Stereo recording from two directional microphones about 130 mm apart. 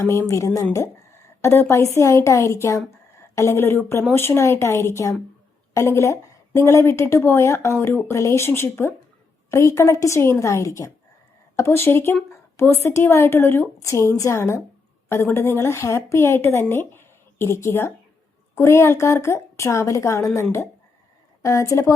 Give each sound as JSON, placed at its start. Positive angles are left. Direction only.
{"t": 0.0, "sound": "a woman's voice", "side_deg": 20}